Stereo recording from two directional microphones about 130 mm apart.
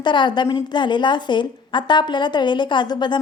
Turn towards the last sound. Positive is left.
turn(degrees=35)  # may be behind; listen again after turning